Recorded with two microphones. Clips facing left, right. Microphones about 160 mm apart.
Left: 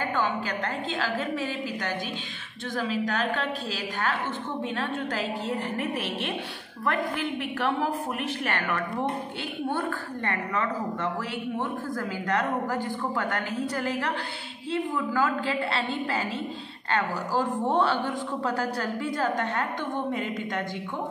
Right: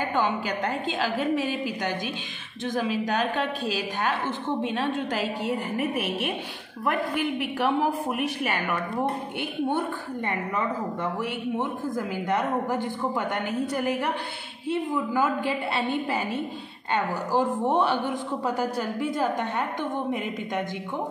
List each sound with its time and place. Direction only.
0.1 s a woman's voice: 15° right (ahead or behind)